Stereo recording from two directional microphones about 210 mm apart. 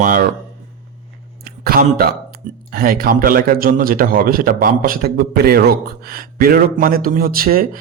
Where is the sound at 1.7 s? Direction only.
45° right (ahead or behind).